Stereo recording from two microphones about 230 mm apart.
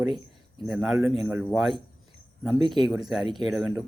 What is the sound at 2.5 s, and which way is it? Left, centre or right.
Speech, centre.